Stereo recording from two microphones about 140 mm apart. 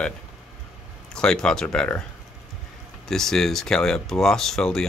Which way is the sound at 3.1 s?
5° left (ahead or behind).